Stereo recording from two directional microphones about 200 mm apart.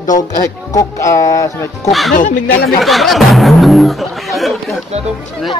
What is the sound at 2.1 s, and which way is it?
Speech, 40° left (ahead or behind).